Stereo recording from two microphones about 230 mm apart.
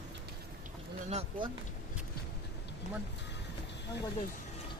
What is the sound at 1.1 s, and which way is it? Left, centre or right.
Speech, right.